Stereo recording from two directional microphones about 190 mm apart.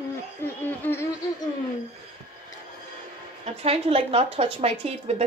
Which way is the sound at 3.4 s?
30° right (ahead or behind).